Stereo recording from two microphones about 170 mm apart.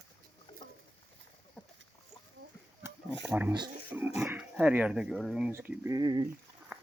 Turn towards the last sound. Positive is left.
turn(degrees=-25)  # may be behind; listen again after turning